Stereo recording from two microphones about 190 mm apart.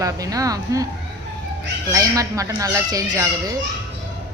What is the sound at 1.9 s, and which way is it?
Speech, 15° right (ahead or behind).